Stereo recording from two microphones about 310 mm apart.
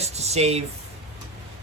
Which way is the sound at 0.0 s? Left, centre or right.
Right.